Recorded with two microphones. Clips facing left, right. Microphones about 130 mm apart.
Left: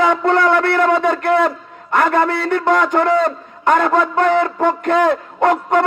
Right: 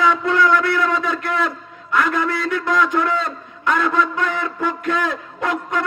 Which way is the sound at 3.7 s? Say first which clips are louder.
Left 5 dB; 45° left (ahead or behind).